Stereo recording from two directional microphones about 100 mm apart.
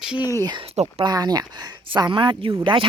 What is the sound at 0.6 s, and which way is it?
Speech, 90° right.